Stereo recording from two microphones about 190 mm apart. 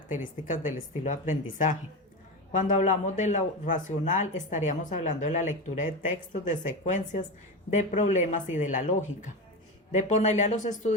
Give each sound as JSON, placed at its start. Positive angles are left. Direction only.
{"t": 0.1, "sound": "speech", "side_deg": 45}